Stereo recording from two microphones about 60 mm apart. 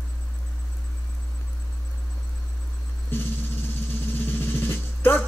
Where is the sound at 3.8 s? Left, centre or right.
Left.